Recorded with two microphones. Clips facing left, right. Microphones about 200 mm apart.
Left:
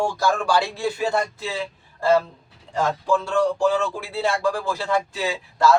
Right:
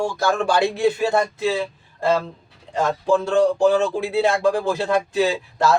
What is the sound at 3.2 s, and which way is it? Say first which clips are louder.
Speech: right 5 dB; 20° right (ahead or behind).